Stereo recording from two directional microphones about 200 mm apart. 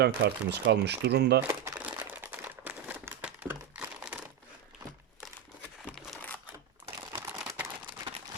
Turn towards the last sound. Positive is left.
turn(degrees=-10)  # may be behind; listen again after turning